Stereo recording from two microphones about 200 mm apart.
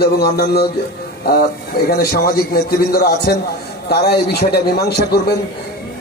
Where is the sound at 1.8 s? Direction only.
50° left (ahead or behind).